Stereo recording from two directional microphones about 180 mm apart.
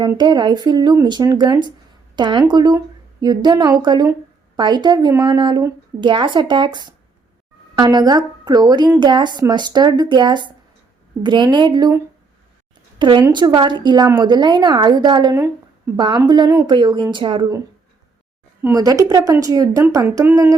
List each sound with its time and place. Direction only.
0.2 s a woman's voice: 25° right (ahead or behind)
18.6 s speech: 20° right (ahead or behind)